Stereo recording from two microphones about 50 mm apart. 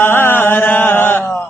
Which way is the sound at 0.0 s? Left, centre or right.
Left.